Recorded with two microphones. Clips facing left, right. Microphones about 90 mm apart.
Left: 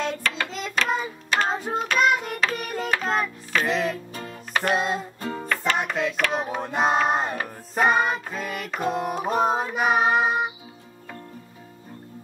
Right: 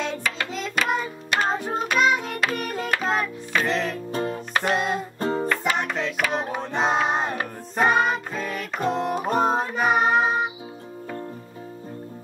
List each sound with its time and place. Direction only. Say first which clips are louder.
0.0 s hands: left 1 dB; centre (ahead or behind)
1.4 s child singing: right 1 dB; centre (ahead or behind)
3.0 s music: right 1 dB; 5° right (ahead or behind)
4.1 s music: right 10 dB; 45° right (ahead or behind)
4.6 s music: even; centre (ahead or behind)
5.2 s music: right 7 dB; 40° right (ahead or behind)
5.5 s music: even; 5° right (ahead or behind)
6.6 s a sound: left 1 dB; 5° left (ahead or behind)
7.7 s music: right 1 dB; 5° left (ahead or behind)